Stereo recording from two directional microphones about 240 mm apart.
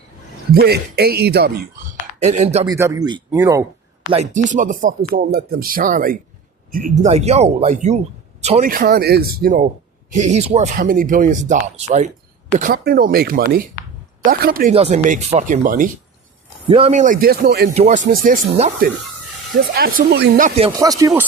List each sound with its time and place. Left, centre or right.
0.5 s speech: right
2.1 s speech: right
2.6 s speech: centre
4.1 s speech: right
20.6 s speech: centre